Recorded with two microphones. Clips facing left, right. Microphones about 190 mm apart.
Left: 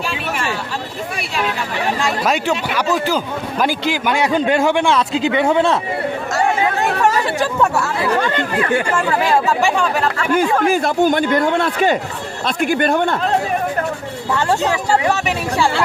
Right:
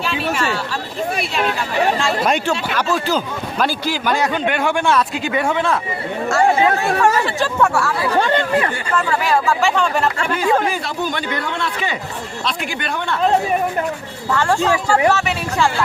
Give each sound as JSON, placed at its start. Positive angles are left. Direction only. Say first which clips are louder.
{"t": 2.5, "sound": "speech", "louder": "left 1 dB", "side_deg": 15}
{"t": 4.3, "sound": "speech", "louder": "left 4 dB", "side_deg": 30}
{"t": 7.6, "sound": "speech", "louder": "right 2 dB", "side_deg": 20}
{"t": 9.2, "sound": "speech", "louder": "left 1 dB", "side_deg": 20}
{"t": 10.3, "sound": "speech", "louder": "left 5 dB", "side_deg": 50}
{"t": 14.6, "sound": "speech", "louder": "right 1 dB", "side_deg": 20}